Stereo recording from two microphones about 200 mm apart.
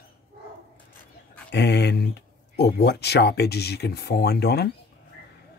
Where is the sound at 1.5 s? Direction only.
55° left (ahead or behind).